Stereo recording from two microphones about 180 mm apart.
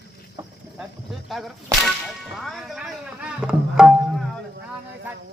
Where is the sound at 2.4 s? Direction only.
Centre (ahead or behind).